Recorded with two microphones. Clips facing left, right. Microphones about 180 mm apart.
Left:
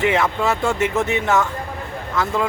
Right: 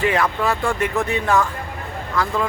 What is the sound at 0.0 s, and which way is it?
Speech, 20° left (ahead or behind).